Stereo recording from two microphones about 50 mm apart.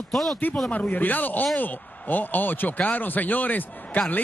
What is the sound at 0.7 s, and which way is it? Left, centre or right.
A man's voice, left.